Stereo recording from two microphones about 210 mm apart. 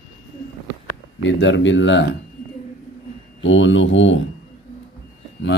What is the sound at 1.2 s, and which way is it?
Speech, 60° left (ahead or behind).